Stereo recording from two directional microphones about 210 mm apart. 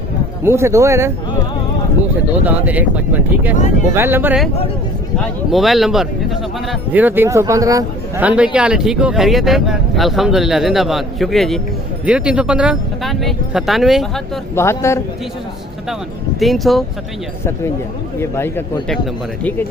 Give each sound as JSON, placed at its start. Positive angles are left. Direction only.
{"t": 0.4, "sound": "speech", "side_deg": -15}
{"t": 2.4, "sound": "speech", "side_deg": -5}
{"t": 5.5, "sound": "a man's voice", "side_deg": 0}
{"t": 14.5, "sound": "a man's voice", "side_deg": 10}
{"t": 16.4, "sound": "a man's voice", "side_deg": 0}
{"t": 18.2, "sound": "a man's voice", "side_deg": 10}